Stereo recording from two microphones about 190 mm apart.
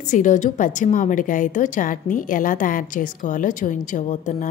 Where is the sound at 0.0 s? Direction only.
40° left (ahead or behind).